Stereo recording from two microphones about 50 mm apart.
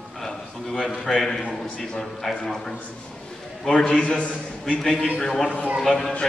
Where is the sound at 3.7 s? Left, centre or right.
Centre.